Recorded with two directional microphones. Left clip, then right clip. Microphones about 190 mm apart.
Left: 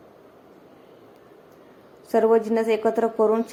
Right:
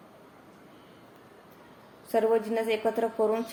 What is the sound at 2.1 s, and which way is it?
A woman's voice, 20° left (ahead or behind).